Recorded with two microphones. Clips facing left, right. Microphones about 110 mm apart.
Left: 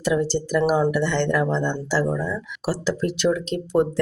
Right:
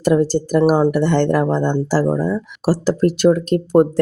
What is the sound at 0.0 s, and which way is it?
Speech, 45° right (ahead or behind).